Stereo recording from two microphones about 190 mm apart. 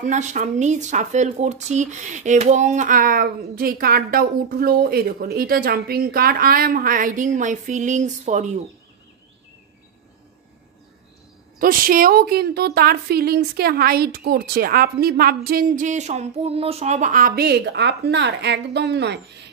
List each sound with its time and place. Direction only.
0.0 s speech: 40° right (ahead or behind)
11.5 s a woman's voice: 50° right (ahead or behind); by 19.4 s 65° right (ahead or behind)